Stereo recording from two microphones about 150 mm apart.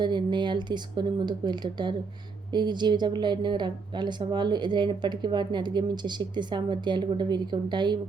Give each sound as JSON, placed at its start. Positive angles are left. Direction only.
{"t": 0.0, "sound": "speech", "side_deg": -30}